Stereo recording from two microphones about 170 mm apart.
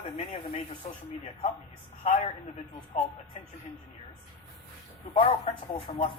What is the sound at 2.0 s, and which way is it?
Speech, 40° left (ahead or behind).